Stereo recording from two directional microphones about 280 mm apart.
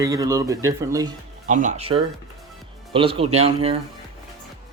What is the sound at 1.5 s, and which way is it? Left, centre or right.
Speech, right.